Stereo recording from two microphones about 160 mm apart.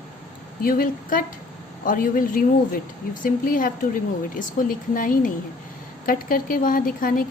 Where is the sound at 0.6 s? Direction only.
60° left (ahead or behind).